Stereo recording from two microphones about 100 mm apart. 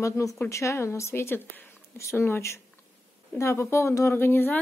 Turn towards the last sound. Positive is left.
turn(degrees=20)  # may be behind; listen again after turning